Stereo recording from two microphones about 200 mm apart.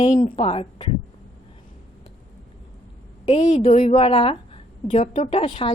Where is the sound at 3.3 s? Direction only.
30° left (ahead or behind).